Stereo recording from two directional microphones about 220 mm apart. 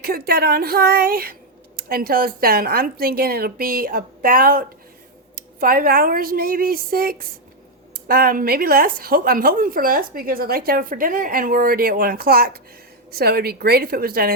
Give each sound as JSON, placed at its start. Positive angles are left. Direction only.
{"t": 0.0, "sound": "speech", "side_deg": -45}